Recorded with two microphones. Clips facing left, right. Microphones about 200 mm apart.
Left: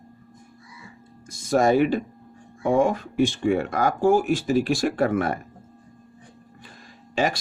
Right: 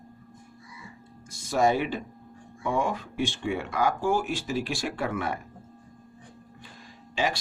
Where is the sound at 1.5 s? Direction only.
45° left (ahead or behind).